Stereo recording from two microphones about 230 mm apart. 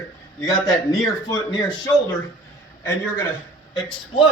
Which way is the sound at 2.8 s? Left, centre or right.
Centre.